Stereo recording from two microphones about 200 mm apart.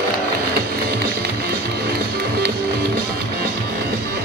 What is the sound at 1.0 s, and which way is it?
Music, 50° right (ahead or behind).